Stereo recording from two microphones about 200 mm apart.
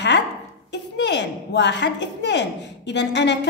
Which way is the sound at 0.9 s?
60° left (ahead or behind).